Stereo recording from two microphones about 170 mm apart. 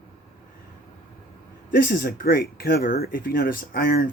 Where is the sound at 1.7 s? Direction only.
60° left (ahead or behind).